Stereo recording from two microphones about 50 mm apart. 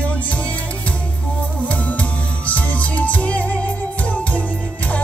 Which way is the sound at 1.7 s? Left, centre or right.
Left.